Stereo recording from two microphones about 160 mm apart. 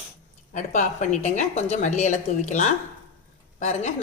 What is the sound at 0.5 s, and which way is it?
A woman's voice, 50° left (ahead or behind).